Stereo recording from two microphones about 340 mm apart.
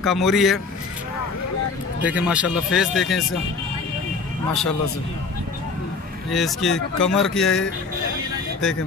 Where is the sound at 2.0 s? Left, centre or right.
Centre.